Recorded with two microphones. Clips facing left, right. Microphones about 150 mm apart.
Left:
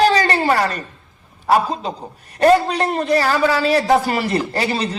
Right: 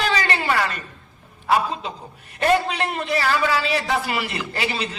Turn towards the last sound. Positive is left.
turn(degrees=40)  # may be behind; listen again after turning